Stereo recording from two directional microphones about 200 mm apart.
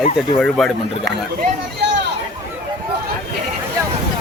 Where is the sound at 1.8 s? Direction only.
60° right (ahead or behind).